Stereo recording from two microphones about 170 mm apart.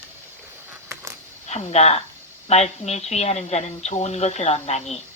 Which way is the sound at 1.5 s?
40° left (ahead or behind).